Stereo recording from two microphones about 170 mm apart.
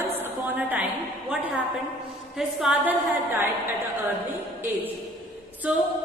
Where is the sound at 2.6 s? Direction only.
5° right (ahead or behind).